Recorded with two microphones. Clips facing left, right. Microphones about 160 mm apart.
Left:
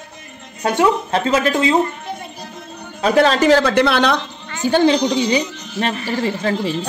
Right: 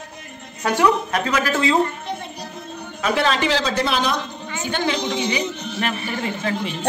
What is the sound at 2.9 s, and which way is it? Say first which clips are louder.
Speech: left 6 dB; 35° left (ahead or behind).